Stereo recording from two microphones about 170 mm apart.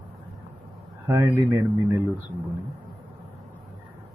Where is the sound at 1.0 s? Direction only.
15° right (ahead or behind).